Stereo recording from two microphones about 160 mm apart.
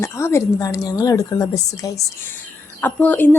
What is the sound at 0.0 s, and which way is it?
A woman's voice, 15° left (ahead or behind).